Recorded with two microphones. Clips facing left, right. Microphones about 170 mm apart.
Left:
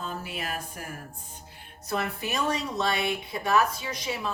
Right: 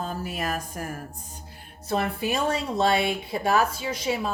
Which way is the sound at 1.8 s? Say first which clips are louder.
Right 4 dB; 30° right (ahead or behind).